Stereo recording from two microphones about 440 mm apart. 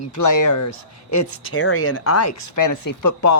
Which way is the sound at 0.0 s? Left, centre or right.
Left.